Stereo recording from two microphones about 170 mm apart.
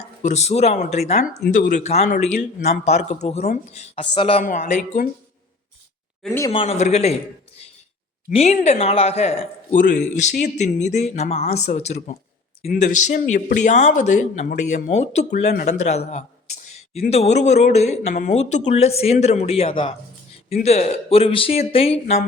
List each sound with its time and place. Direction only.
0.2 s speech: 40° left (ahead or behind)
4.4 s speech: 50° left (ahead or behind)
6.5 s speech: 35° left (ahead or behind)
8.3 s speech: 40° left (ahead or behind)
9.7 s speech: 50° left (ahead or behind)
12.6 s speech: 60° left (ahead or behind)
13.1 s speech: 45° left (ahead or behind)